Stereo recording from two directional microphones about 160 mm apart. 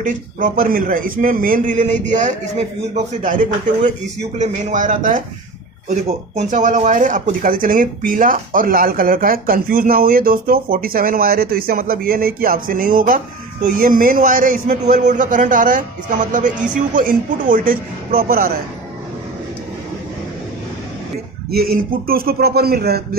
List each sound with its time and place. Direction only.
0.0 s speech: 60° right (ahead or behind)
21.5 s speech: 70° right (ahead or behind)